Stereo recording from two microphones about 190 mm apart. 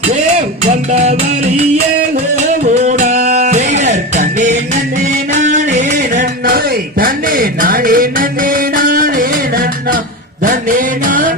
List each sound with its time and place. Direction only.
0.6 s music: 40° right (ahead or behind)
2.8 s music: 40° right (ahead or behind)